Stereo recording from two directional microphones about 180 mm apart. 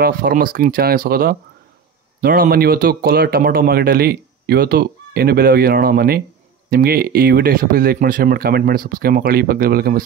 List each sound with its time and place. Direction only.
0.0 s speech: 55° right (ahead or behind)